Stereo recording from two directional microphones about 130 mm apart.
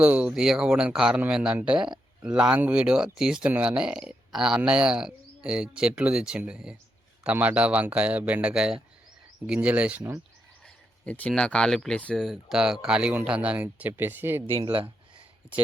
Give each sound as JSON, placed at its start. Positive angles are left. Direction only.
{"t": 0.0, "sound": "speech", "side_deg": -10}
{"t": 11.0, "sound": "speech", "side_deg": 10}
{"t": 14.6, "sound": "speech", "side_deg": -40}
{"t": 15.4, "sound": "speech", "side_deg": -10}